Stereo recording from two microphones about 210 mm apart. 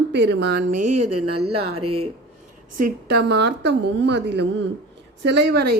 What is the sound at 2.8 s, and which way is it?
A woman's voice, 50° right (ahead or behind).